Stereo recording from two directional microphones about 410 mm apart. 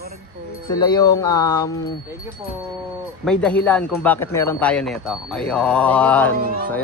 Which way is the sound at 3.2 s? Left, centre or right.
Centre.